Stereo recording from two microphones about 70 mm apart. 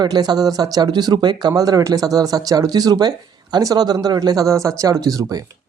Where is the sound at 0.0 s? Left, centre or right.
Right.